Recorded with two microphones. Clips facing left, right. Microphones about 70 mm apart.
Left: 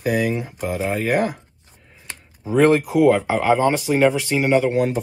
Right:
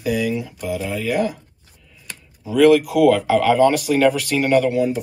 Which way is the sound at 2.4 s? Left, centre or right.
Left.